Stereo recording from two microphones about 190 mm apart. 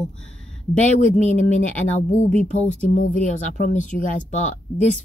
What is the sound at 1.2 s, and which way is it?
Speech, 40° left (ahead or behind).